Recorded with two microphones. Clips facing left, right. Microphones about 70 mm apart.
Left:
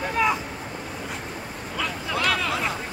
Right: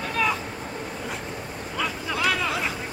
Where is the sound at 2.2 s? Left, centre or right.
Centre.